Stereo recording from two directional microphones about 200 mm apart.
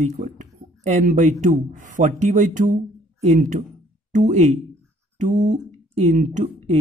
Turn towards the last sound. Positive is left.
turn(degrees=-35)  # may be behind; listen again after turning